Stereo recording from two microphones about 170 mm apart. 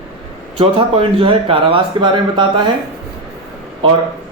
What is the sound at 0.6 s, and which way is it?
Speech, 30° right (ahead or behind).